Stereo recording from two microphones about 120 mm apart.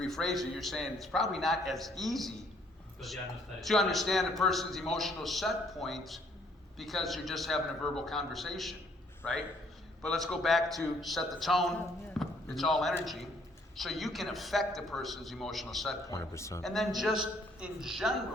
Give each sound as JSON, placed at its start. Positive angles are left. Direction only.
{"t": 0.0, "sound": "a man's voice", "side_deg": 5}
{"t": 12.2, "sound": "basketball bounce", "side_deg": 0}
{"t": 13.7, "sound": "a man's voice", "side_deg": 0}
{"t": 16.0, "sound": "speech", "side_deg": 25}
{"t": 16.6, "sound": "a man's voice", "side_deg": 0}